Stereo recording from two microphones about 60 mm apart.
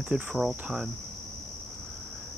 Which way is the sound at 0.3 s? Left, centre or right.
Centre.